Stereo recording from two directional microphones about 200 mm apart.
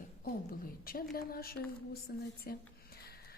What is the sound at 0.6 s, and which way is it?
A woman's voice, 45° left (ahead or behind).